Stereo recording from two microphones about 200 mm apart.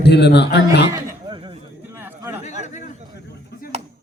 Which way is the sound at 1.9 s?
10° right (ahead or behind).